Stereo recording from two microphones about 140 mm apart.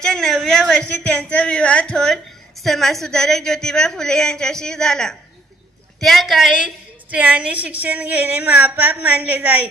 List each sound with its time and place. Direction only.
0.0 s a woman's voice: 5° left (ahead or behind); by 9.6 s 15° right (ahead or behind)